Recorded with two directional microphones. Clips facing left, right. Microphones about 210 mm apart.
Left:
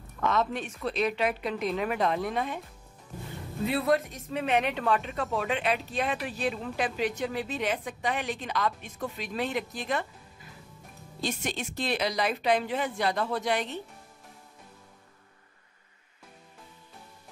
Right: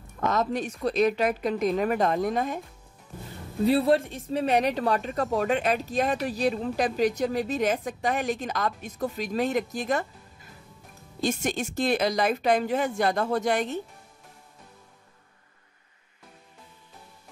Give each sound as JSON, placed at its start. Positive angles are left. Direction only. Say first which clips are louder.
{"t": 0.2, "sound": "a woman's voice", "louder": "right 2 dB", "side_deg": -40}
{"t": 3.6, "sound": "a woman's voice", "louder": "right 5 dB", "side_deg": -30}
{"t": 11.2, "sound": "a woman's voice", "louder": "right 6 dB", "side_deg": -45}